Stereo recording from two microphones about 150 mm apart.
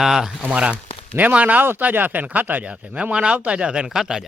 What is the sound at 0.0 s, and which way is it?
Speech, centre (ahead or behind).